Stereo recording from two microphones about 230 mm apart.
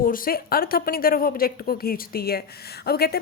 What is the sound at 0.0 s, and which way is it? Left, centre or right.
A woman's voice, left.